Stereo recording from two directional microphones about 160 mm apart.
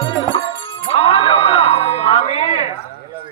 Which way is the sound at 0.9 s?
40° left (ahead or behind).